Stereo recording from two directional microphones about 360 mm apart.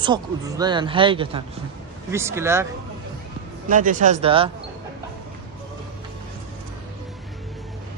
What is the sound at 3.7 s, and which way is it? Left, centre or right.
Speech, right.